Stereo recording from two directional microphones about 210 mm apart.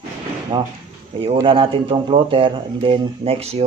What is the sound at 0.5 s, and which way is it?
Speech, 20° right (ahead or behind).